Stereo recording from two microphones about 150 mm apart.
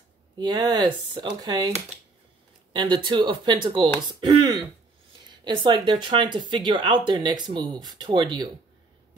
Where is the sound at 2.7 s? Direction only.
30° right (ahead or behind).